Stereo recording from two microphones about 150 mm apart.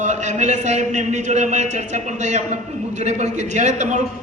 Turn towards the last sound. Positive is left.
turn(degrees=-55)  # may be behind; listen again after turning